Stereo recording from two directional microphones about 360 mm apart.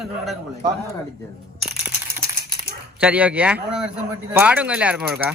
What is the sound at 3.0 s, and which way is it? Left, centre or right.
A man's voice, centre.